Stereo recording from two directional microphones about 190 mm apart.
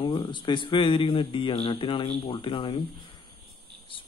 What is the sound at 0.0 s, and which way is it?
Speech, 25° left (ahead or behind).